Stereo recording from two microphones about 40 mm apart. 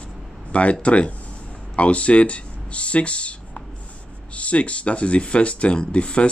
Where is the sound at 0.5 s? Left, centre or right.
Left.